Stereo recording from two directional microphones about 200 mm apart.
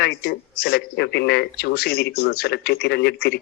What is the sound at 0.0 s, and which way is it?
Speech, 50° left (ahead or behind).